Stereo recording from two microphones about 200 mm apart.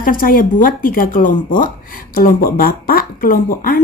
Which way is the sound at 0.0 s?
45° left (ahead or behind).